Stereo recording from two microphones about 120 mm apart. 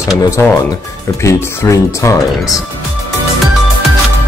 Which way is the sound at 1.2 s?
25° left (ahead or behind).